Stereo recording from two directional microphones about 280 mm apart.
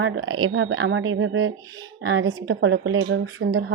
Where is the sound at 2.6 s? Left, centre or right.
Right.